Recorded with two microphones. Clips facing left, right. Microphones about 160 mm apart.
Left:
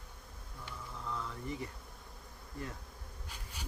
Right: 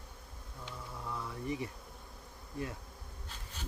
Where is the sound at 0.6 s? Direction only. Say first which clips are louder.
Even; 15° right (ahead or behind).